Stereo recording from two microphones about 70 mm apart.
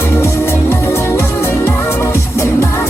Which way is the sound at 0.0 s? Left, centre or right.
Left.